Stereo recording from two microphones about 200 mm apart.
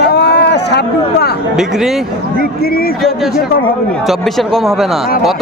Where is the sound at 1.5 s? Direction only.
Centre (ahead or behind).